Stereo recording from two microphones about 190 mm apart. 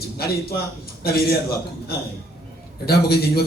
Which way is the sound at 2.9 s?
55° left (ahead or behind).